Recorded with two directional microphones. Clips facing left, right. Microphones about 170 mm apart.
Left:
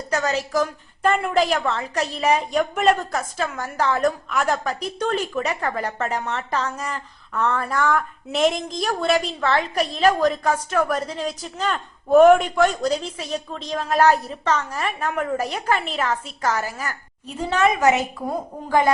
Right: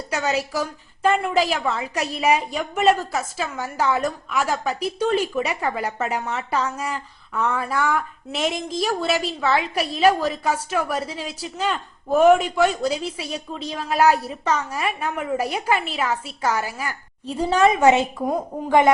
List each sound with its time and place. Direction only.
0.1 s a woman's voice: 10° right (ahead or behind)
17.2 s a woman's voice: 30° right (ahead or behind)